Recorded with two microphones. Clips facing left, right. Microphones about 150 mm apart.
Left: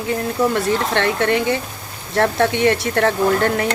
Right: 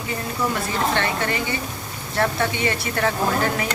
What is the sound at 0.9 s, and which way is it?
Speech, 75° left (ahead or behind).